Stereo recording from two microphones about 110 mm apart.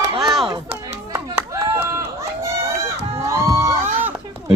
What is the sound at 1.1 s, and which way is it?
Chop, 30° right (ahead or behind).